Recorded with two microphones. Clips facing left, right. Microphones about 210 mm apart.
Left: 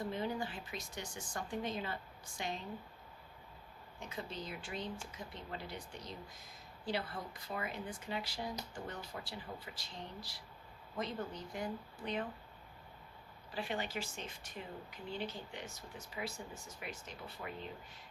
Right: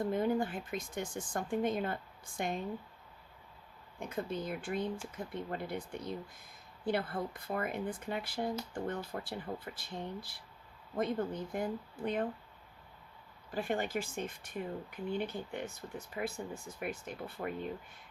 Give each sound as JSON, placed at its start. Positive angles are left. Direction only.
{"t": 0.0, "sound": "speech", "side_deg": -50}
{"t": 4.0, "sound": "speech", "side_deg": -55}
{"t": 13.5, "sound": "speech", "side_deg": -50}